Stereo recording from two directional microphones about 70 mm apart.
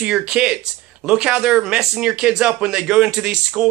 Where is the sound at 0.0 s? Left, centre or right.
Centre.